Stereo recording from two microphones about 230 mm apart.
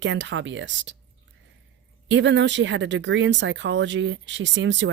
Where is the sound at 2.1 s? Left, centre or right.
Right.